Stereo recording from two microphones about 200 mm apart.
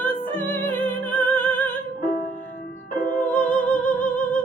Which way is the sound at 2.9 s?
40° left (ahead or behind).